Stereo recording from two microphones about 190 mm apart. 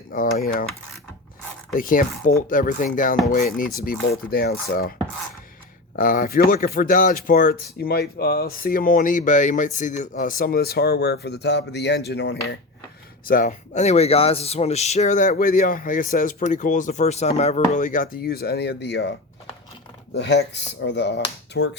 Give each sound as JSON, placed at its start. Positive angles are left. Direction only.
{"t": 0.1, "sound": "speech", "side_deg": 45}
{"t": 1.7, "sound": "speech", "side_deg": 45}
{"t": 6.0, "sound": "speech", "side_deg": 45}
{"t": 13.2, "sound": "speech", "side_deg": 45}
{"t": 20.1, "sound": "speech", "side_deg": 65}